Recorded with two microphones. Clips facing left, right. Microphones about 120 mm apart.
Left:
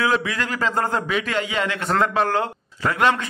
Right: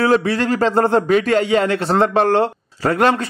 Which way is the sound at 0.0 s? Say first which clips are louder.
Right 7 dB; 40° right (ahead or behind).